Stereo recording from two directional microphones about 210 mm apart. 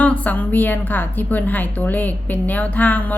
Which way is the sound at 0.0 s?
5° left (ahead or behind).